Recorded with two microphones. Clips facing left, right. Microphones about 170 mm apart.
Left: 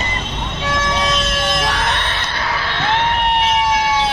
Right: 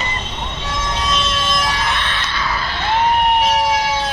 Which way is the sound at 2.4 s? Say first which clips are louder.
Left 1 dB; 80° left.